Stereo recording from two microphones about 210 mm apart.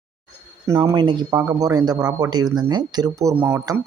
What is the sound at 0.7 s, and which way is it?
Speech, 15° right (ahead or behind).